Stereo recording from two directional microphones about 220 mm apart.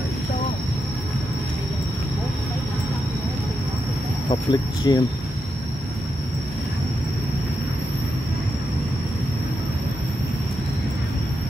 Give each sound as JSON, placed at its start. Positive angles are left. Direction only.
{"t": 4.3, "sound": "speech", "side_deg": 20}